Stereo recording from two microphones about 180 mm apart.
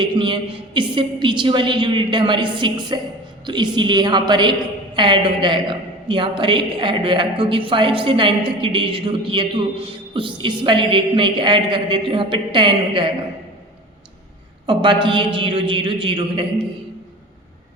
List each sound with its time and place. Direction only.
0.0 s a woman's voice: 25° right (ahead or behind)
14.7 s a woman's voice: 25° right (ahead or behind)